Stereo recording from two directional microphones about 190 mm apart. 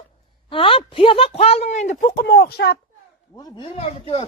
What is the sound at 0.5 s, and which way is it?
Speech, 30° left (ahead or behind).